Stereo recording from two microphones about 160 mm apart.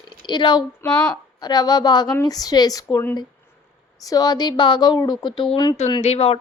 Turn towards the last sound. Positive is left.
turn(degrees=40)  # may be behind; listen again after turning